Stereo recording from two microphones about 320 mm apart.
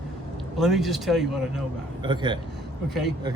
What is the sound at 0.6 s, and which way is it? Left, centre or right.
Speech, centre.